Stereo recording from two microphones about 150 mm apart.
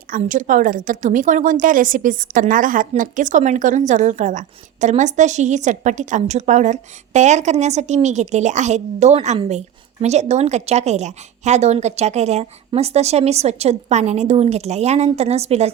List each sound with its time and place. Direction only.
0.2 s a woman's voice: 60° right (ahead or behind); by 15.7 s 45° right (ahead or behind)